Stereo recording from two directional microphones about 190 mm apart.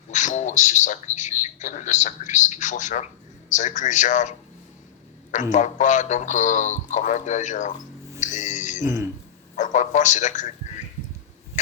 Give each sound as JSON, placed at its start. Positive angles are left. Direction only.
{"t": 0.1, "sound": "a man's voice", "side_deg": 40}
{"t": 8.2, "sound": "a sound", "side_deg": 40}
{"t": 9.6, "sound": "a man's voice", "side_deg": 40}